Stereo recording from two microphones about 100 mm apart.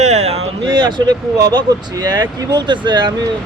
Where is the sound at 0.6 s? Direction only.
50° right (ahead or behind).